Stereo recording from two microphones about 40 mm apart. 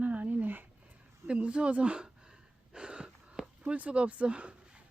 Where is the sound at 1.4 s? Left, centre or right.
Right.